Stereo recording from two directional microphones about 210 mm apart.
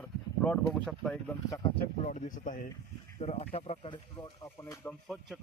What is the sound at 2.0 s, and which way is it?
Speech, 35° left (ahead or behind).